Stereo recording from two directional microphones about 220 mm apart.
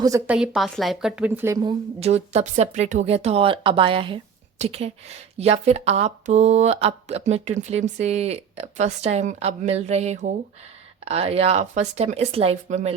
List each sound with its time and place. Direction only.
0.0 s a woman's voice: 15° right (ahead or behind)
0.3 s speech: 5° right (ahead or behind)
2.0 s speech: 30° right (ahead or behind)